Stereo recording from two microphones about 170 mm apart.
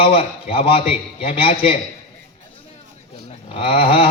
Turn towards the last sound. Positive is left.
turn(degrees=35)  # may be behind; listen again after turning